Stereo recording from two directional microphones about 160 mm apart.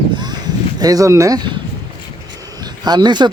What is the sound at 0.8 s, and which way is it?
Speech, 20° right (ahead or behind).